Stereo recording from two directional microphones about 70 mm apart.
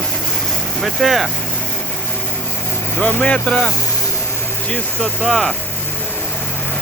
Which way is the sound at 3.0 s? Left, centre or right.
Centre.